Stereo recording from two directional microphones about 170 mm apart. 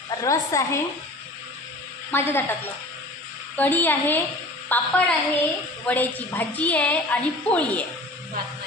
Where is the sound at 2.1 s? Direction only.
15° left (ahead or behind).